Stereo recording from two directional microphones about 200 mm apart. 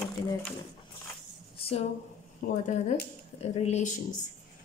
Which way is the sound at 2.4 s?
45° left (ahead or behind).